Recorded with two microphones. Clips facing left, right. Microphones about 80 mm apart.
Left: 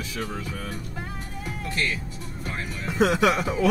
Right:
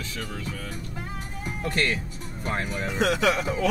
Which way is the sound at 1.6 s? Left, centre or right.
Right.